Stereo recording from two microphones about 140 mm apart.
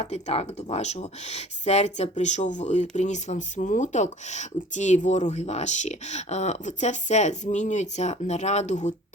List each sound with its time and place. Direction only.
0.0 s speech: 45° left (ahead or behind)